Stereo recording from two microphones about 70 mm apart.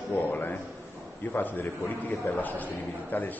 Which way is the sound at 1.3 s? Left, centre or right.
Left.